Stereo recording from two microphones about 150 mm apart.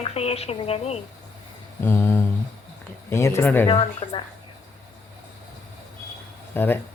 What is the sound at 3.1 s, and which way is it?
Speech, 15° left (ahead or behind).